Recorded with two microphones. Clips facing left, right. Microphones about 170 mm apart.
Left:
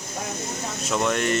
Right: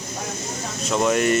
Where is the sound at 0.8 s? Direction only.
Centre (ahead or behind).